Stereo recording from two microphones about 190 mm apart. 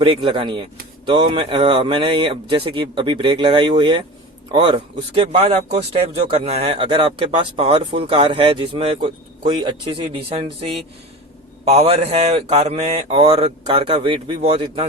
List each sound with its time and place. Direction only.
0.0 s speech: 30° right (ahead or behind)